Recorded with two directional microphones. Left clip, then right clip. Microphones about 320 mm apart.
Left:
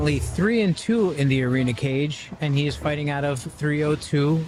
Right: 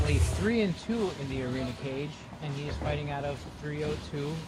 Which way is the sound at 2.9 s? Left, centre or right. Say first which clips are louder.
Left 8 dB; left.